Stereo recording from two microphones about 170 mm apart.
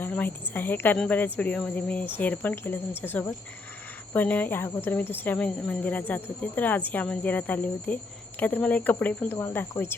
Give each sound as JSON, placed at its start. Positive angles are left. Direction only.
{"t": 0.0, "sound": "speech", "side_deg": 10}